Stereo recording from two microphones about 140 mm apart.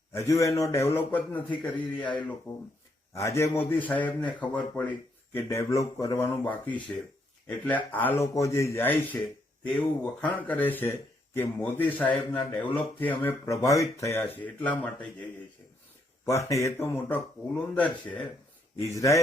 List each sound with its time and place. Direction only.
0.3 s speech: 20° left (ahead or behind)
13.4 s speech: 25° left (ahead or behind)
16.2 s speech: 20° left (ahead or behind)
18.8 s speech: 20° left (ahead or behind)